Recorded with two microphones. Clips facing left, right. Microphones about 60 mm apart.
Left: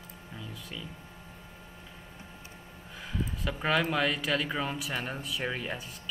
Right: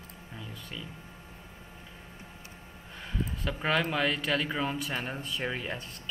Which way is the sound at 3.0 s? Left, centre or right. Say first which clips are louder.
Even; centre.